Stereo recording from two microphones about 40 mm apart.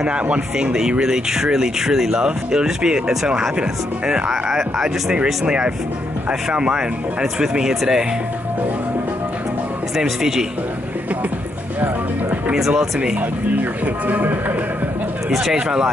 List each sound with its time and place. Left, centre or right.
0.0 s speech: right
4.3 s speech: centre
6.5 s speech: right
9.9 s a man's voice: centre
12.5 s speech: centre
13.5 s speech: right
15.5 s speech: right